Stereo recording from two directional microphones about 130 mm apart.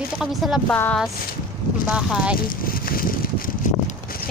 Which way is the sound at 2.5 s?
90° left.